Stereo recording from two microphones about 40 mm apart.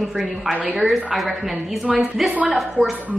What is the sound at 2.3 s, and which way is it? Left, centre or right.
Speech, right.